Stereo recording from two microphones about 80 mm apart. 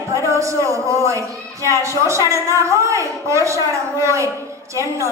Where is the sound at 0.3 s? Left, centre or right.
Right.